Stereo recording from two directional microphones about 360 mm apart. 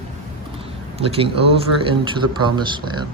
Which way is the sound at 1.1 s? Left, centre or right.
Centre.